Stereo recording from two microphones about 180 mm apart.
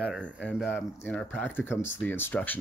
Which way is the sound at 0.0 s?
5° left (ahead or behind).